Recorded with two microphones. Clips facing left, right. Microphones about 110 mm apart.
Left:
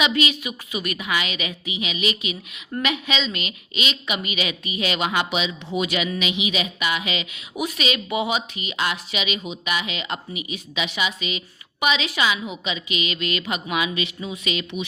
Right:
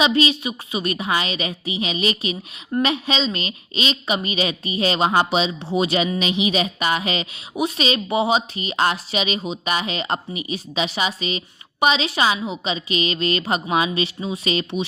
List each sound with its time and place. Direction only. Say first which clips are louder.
0.0 s speech: right 4 dB; 30° right (ahead or behind)